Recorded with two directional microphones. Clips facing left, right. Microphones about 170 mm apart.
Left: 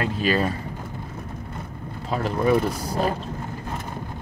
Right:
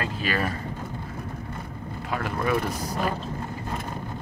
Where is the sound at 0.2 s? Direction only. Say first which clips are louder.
Left 6 dB; 25° left (ahead or behind).